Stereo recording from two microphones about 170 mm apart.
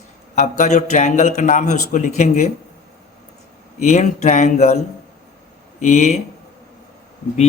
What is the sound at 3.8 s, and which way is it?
A man's voice, 45° left (ahead or behind).